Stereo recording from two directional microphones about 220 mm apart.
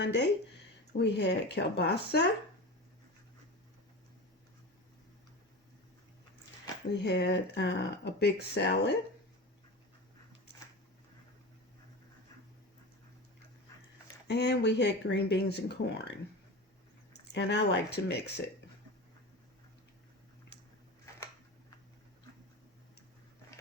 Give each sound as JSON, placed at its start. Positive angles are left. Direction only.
{"t": 0.0, "sound": "speech", "side_deg": 50}
{"t": 6.9, "sound": "speech", "side_deg": 50}
{"t": 14.3, "sound": "speech", "side_deg": 50}
{"t": 17.3, "sound": "speech", "side_deg": 55}